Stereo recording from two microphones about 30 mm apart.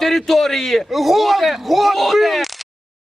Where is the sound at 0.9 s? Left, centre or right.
Centre.